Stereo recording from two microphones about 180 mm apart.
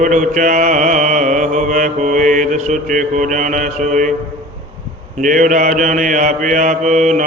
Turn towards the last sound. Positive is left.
turn(degrees=-45)  # may be behind; listen again after turning